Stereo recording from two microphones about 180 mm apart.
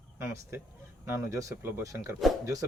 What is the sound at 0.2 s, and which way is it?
Speech, 15° right (ahead or behind).